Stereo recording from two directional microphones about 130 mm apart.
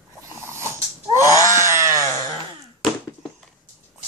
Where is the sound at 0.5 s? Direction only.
20° right (ahead or behind).